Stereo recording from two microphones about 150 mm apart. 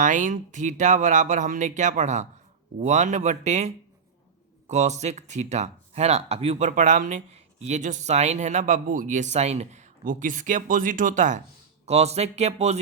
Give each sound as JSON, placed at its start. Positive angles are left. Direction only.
{"t": 0.0, "sound": "speech", "side_deg": -55}
{"t": 4.7, "sound": "speech", "side_deg": -50}
{"t": 11.9, "sound": "speech", "side_deg": -45}